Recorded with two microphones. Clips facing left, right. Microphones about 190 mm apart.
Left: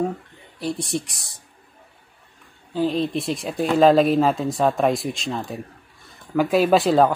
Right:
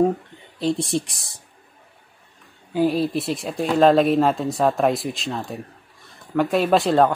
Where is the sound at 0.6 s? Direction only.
25° right (ahead or behind).